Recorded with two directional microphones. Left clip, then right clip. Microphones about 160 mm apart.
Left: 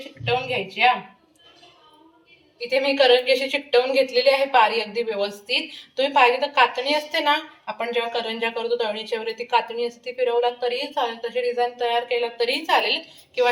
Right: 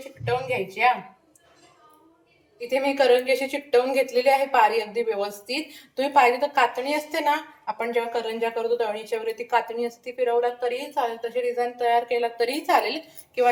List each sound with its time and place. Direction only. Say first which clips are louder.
0.3 s speech: left 2 dB; 25° right (ahead or behind)
2.6 s a woman's voice: left 2 dB; 35° right (ahead or behind)